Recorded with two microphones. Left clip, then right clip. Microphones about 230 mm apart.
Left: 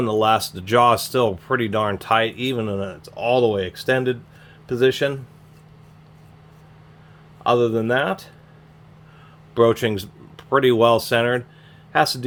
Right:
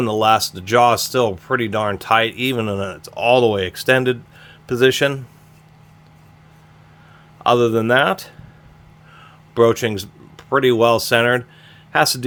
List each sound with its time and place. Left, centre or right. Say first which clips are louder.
0.0 s speech: right 3 dB; centre
7.4 s speech: right 3 dB; right
9.6 s speech: right 2 dB; centre